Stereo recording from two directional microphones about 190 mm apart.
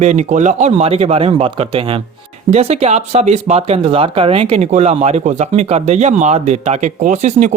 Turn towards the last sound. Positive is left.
turn(degrees=-40)  # may be behind; listen again after turning